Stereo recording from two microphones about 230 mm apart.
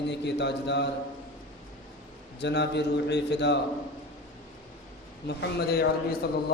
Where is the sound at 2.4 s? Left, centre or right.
Left.